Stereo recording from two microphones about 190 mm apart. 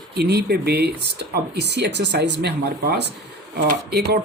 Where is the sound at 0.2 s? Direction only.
60° right (ahead or behind).